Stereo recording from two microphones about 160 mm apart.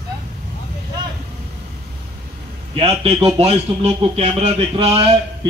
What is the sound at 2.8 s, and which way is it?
Speech, 35° right (ahead or behind).